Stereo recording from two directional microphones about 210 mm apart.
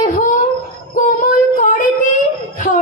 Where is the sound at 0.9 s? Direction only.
40° left (ahead or behind).